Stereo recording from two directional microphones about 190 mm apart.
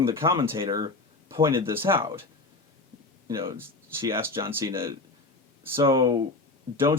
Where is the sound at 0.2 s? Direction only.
30° right (ahead or behind); by 2.2 s 15° right (ahead or behind).